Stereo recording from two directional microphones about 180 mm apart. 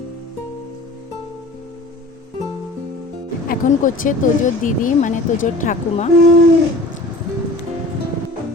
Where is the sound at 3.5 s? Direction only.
45° left (ahead or behind).